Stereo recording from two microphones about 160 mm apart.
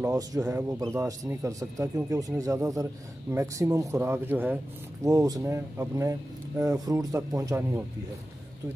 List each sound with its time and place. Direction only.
0.0 s speech: 20° right (ahead or behind)